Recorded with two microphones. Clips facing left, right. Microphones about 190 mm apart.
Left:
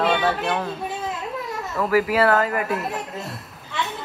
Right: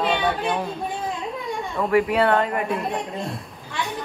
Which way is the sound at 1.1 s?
5° left (ahead or behind).